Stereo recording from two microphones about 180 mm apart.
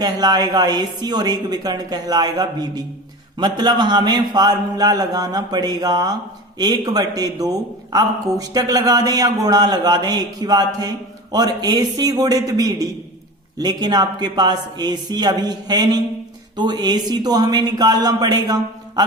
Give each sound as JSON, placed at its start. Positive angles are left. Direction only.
{"t": 0.0, "sound": "a man's voice", "side_deg": -20}